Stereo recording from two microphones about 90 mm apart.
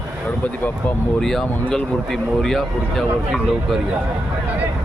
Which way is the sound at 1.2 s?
5° left (ahead or behind).